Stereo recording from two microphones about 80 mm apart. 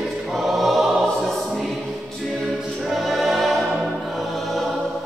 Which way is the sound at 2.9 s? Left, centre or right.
Centre.